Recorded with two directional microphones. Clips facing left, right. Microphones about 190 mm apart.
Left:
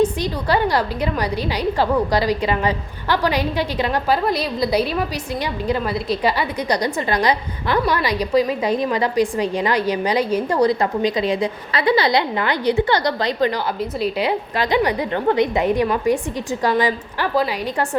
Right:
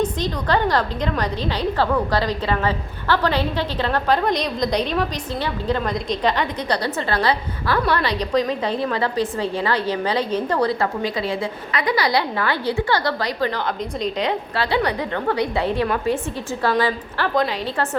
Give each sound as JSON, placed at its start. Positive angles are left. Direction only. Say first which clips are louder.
{"t": 0.0, "sound": "a woman's voice", "louder": "left 3 dB", "side_deg": 10}
{"t": 11.7, "sound": "a woman's voice", "louder": "left 3 dB", "side_deg": 30}
{"t": 14.0, "sound": "a woman's voice", "louder": "left 2 dB", "side_deg": 10}